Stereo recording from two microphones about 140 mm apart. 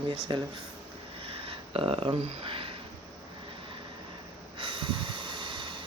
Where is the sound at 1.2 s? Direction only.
40° right (ahead or behind).